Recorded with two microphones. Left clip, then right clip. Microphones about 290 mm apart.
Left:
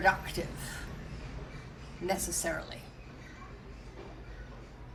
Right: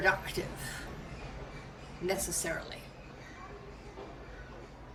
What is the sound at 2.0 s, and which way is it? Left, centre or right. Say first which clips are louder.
Speech: left 1 dB; centre.